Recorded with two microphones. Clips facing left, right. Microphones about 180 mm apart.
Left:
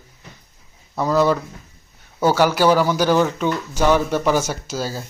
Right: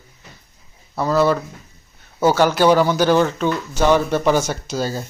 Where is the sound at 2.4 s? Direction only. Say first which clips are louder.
Right 1 dB; 10° left (ahead or behind).